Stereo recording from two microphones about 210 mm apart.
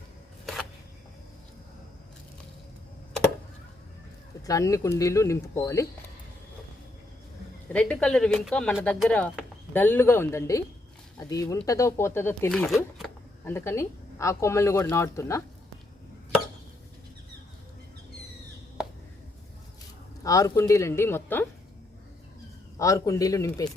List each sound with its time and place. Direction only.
4.4 s speech: 15° left (ahead or behind)
7.7 s speech: 5° left (ahead or behind)
13.4 s speech: 10° left (ahead or behind)
20.2 s speech: 15° left (ahead or behind)
22.8 s speech: 15° left (ahead or behind)